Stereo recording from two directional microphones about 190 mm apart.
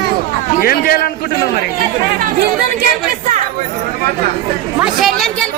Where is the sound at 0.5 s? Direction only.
50° left (ahead or behind).